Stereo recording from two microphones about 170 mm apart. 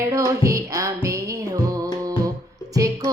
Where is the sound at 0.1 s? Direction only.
20° right (ahead or behind).